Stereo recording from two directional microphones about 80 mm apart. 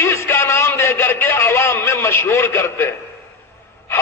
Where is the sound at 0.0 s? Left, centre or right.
Left.